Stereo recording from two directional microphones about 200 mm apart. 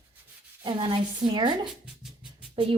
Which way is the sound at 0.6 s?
20° right (ahead or behind).